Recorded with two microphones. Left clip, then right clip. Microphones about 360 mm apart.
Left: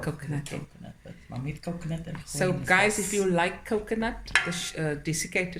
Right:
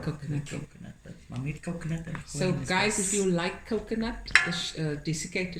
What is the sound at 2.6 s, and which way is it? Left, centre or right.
Speech, centre.